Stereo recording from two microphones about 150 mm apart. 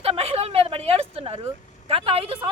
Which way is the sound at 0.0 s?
40° right (ahead or behind).